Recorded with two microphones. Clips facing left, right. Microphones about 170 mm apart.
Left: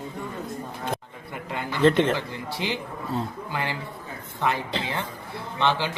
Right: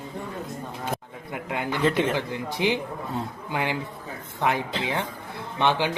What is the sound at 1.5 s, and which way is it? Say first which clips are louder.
Speech: left 4 dB; 15° right (ahead or behind).